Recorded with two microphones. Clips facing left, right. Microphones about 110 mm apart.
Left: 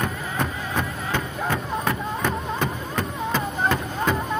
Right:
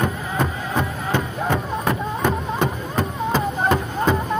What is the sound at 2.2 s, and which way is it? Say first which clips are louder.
Music: right 5 dB; 15° right (ahead or behind).